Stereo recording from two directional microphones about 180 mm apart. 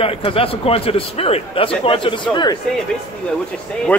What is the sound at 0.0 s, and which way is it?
A man's voice, 30° left (ahead or behind).